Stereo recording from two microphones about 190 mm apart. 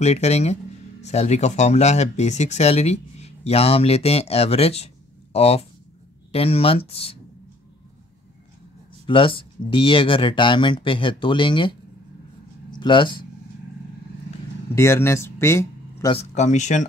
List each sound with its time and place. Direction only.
0.0 s speech: 35° left (ahead or behind)
9.0 s speech: 25° left (ahead or behind)
12.7 s speech: 25° left (ahead or behind)
14.8 s speech: 15° left (ahead or behind)
16.1 s speech: 35° left (ahead or behind)